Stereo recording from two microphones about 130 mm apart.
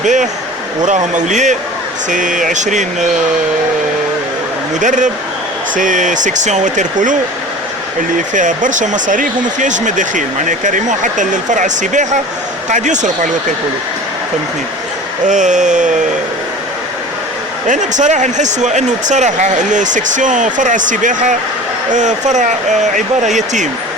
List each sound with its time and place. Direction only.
0.0 s speech: 70° right (ahead or behind)
2.0 s speech: 80° right
4.8 s speech: 75° right (ahead or behind)
5.7 s speech: 85° right
8.3 s speech: 75° right (ahead or behind)
15.3 s speech: 70° right (ahead or behind)
17.7 s speech: 70° right (ahead or behind)
21.9 s speech: 70° right (ahead or behind)